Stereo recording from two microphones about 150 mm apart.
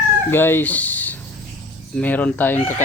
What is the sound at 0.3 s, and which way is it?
Speech, 15° left (ahead or behind).